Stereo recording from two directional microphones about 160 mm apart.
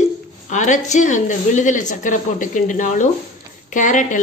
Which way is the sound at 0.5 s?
50° left (ahead or behind).